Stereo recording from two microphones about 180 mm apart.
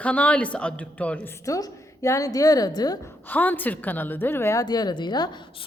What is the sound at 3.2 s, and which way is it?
A woman's voice, 10° left (ahead or behind).